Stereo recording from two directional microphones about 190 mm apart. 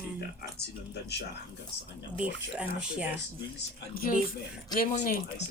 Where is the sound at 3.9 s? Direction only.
50° left (ahead or behind).